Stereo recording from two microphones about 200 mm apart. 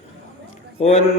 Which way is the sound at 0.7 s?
30° left (ahead or behind).